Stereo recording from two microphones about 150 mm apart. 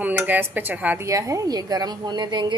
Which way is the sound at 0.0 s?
15° right (ahead or behind).